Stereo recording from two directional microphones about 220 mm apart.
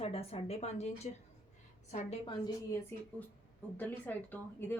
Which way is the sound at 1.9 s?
30° left (ahead or behind).